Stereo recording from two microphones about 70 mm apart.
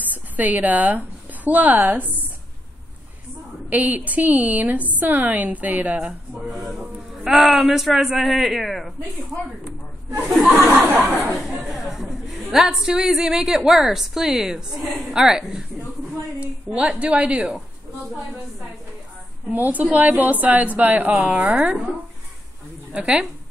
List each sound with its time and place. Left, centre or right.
0.0 s speech: right
3.7 s a woman's voice: right
6.5 s a man's voice: centre
10.7 s a woman's voice: right
11.4 s chatter: centre
13.6 s a man's voice: centre
16.6 s a woman's voice: centre
19.5 s a woman's voice: right
22.9 s a woman's voice: centre